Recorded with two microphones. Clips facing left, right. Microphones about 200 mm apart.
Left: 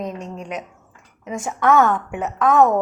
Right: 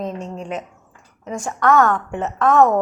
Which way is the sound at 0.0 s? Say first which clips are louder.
Right 2 dB; 30° right (ahead or behind).